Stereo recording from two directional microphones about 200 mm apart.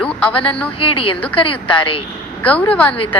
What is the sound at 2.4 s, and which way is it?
Speech, 5° left (ahead or behind).